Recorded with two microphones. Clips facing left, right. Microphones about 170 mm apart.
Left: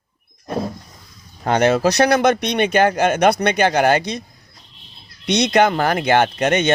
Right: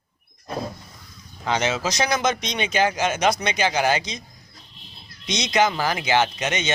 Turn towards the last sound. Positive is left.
turn(degrees=55)  # may be behind; listen again after turning